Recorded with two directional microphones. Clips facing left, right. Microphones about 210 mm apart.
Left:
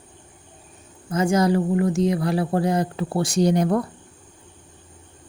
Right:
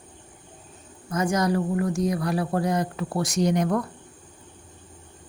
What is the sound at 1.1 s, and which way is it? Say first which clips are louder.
Speech: left 4 dB; 25° left (ahead or behind).